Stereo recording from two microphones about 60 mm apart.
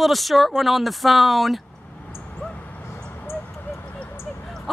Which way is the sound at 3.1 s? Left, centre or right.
Left.